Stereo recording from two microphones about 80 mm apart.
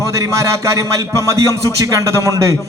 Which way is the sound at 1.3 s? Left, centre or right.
Right.